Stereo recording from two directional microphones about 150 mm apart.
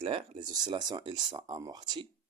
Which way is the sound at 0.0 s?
35° right (ahead or behind).